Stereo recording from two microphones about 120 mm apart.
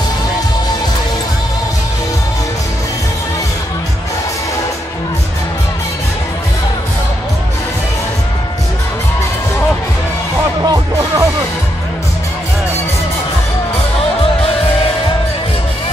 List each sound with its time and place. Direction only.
10.6 s music: 35° right (ahead or behind)